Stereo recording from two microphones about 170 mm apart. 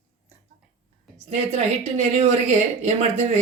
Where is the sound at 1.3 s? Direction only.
40° right (ahead or behind).